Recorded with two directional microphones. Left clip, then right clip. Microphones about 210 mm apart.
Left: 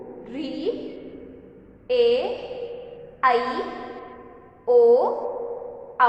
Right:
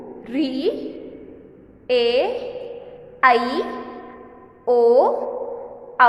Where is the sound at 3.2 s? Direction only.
45° right (ahead or behind).